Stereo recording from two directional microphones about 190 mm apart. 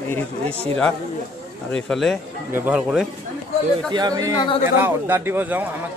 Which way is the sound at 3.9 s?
20° right (ahead or behind).